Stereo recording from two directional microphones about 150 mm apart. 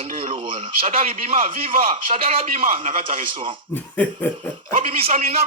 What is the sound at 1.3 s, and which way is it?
A man's voice, 65° right (ahead or behind).